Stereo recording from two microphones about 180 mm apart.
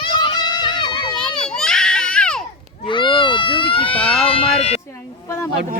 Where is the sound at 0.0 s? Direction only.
25° left (ahead or behind).